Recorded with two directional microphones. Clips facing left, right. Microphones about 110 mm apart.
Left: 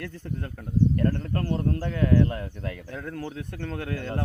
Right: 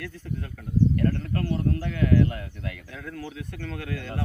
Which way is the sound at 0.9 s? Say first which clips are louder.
Even; 30° left (ahead or behind).